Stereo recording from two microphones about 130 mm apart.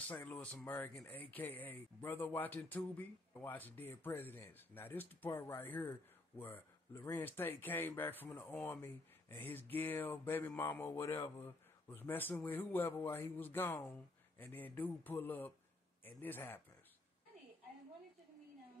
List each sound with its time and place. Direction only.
0.1 s speech: 15° left (ahead or behind)